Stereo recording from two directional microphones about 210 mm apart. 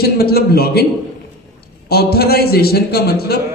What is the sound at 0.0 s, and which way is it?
Speech, 50° left (ahead or behind).